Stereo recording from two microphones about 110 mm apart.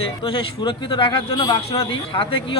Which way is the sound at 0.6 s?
50° left (ahead or behind).